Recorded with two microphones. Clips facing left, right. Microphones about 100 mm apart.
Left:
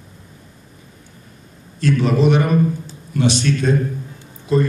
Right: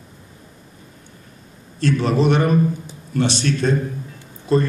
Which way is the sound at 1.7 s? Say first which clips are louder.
Left 1 dB; 35° right (ahead or behind).